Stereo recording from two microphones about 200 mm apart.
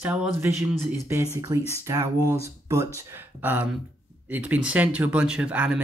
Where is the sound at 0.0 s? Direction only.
10° right (ahead or behind).